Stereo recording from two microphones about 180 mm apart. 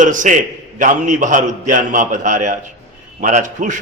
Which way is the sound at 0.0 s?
45° right (ahead or behind).